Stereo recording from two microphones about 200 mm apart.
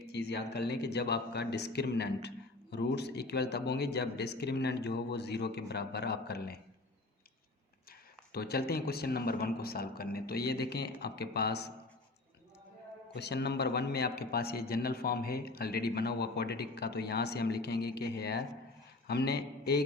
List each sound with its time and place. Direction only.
0.0 s speech: 55° left (ahead or behind)
8.3 s a man's voice: 50° left (ahead or behind)
13.1 s a man's voice: 55° left (ahead or behind)